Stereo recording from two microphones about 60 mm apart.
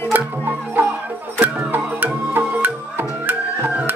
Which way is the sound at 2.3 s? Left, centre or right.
Right.